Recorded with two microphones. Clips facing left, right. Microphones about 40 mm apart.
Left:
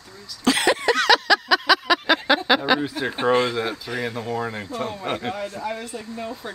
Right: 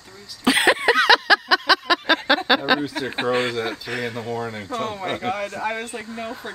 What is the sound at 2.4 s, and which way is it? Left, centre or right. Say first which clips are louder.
Speech: even; centre.